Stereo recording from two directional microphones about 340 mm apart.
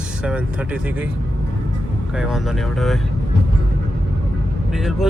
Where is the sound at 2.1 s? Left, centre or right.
Centre.